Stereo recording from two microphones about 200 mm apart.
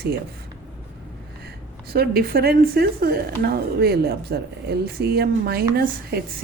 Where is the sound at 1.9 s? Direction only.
50° right (ahead or behind).